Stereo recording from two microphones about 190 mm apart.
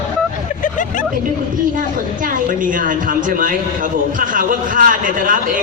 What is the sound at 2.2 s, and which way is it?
A woman's voice, 45° right (ahead or behind).